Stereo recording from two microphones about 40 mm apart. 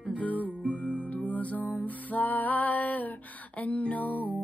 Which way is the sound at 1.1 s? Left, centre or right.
Left.